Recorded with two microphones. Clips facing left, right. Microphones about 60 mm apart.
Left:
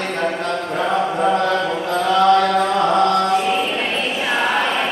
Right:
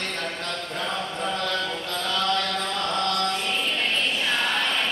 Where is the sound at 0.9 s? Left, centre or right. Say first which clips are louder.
Left 11 dB; left.